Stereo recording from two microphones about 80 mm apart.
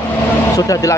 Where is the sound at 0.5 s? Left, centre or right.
Left.